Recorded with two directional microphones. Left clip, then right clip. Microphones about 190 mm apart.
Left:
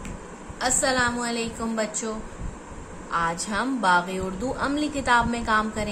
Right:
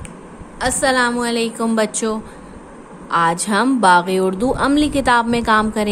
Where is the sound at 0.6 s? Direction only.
40° right (ahead or behind).